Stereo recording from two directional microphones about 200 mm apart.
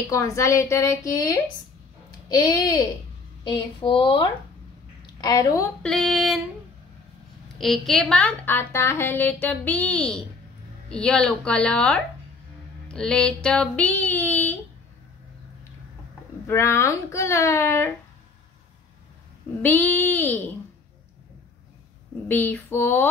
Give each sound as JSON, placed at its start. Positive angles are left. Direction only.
{"t": 0.1, "sound": "a woman's voice", "side_deg": 15}
{"t": 5.8, "sound": "a woman's voice", "side_deg": 0}
{"t": 7.5, "sound": "a woman's voice", "side_deg": 0}
{"t": 16.4, "sound": "a woman's voice", "side_deg": 15}
{"t": 19.6, "sound": "a woman's voice", "side_deg": 10}
{"t": 22.3, "sound": "a woman's voice", "side_deg": 10}